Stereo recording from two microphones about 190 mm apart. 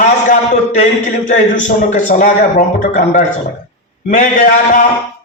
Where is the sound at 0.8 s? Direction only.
40° left (ahead or behind).